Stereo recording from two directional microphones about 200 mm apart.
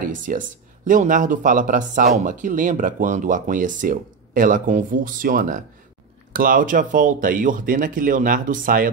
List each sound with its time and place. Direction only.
0.0 s speech: 40° right (ahead or behind)